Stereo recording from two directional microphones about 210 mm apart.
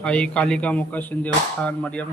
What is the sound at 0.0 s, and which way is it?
Speech, 5° left (ahead or behind).